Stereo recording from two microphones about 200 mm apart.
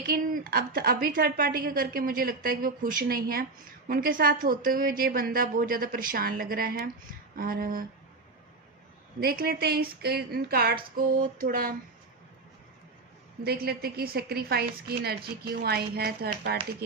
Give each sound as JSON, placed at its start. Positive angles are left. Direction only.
{"t": 0.1, "sound": "a woman's voice", "side_deg": -45}
{"t": 9.2, "sound": "a woman's voice", "side_deg": -50}
{"t": 13.4, "sound": "a woman's voice", "side_deg": -50}